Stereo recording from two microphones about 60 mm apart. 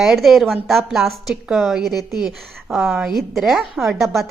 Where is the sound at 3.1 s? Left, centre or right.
Centre.